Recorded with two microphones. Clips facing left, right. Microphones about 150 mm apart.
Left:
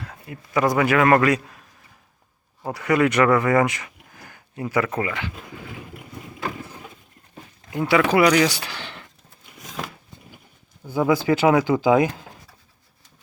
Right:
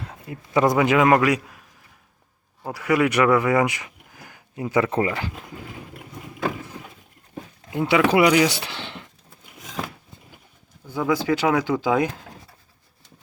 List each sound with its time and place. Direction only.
0.0 s a man's voice: 25° right (ahead or behind); by 1.6 s 10° right (ahead or behind)
2.6 s speech: 5° right (ahead or behind); by 5.3 s 35° right (ahead or behind)
7.7 s speech: 20° right (ahead or behind)
10.8 s speech: 5° left (ahead or behind)